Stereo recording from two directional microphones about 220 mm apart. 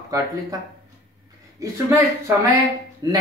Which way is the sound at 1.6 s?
15° right (ahead or behind).